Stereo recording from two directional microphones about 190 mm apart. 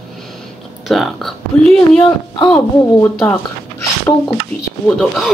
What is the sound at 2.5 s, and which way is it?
Speech, 10° left (ahead or behind).